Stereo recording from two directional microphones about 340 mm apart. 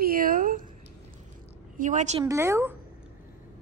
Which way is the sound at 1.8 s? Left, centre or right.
Right.